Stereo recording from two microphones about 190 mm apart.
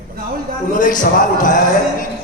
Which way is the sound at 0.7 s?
45° left (ahead or behind).